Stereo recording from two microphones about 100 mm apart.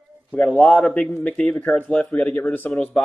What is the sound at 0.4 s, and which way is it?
Speech, centre (ahead or behind).